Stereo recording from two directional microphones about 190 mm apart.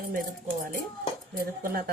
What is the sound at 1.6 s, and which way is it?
Speech, 50° right (ahead or behind).